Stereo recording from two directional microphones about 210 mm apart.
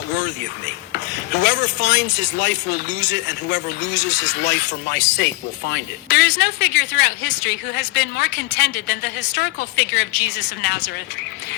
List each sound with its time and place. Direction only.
0.9 s speech: 55° left (ahead or behind)